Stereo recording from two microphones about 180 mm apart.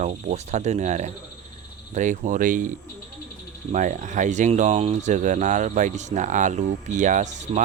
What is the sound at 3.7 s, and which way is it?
Speech, 45° right (ahead or behind).